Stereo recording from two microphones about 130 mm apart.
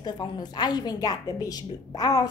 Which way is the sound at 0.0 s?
30° left (ahead or behind).